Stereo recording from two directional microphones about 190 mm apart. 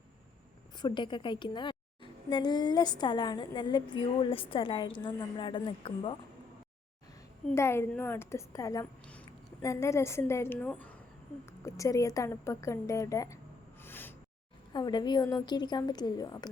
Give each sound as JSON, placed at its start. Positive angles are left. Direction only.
{"t": 0.8, "sound": "a woman's voice", "side_deg": 25}
{"t": 7.5, "sound": "a woman's voice", "side_deg": 15}
{"t": 13.8, "sound": "a sound", "side_deg": 10}
{"t": 14.7, "sound": "a woman's voice", "side_deg": 25}